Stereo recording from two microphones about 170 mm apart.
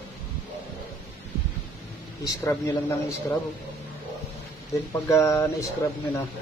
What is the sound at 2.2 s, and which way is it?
A man's voice, 20° left (ahead or behind).